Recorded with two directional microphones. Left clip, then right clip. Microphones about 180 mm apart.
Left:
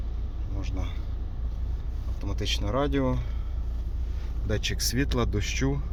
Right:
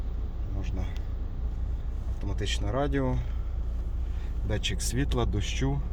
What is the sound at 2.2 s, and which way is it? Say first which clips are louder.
Speech: left 3 dB; 10° left (ahead or behind).